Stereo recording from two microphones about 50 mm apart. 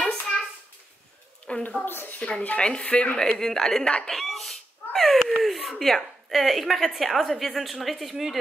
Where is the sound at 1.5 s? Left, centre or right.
Left.